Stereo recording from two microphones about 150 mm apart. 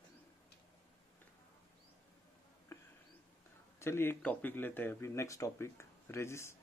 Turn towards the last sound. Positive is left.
turn(degrees=20)  # may be behind; listen again after turning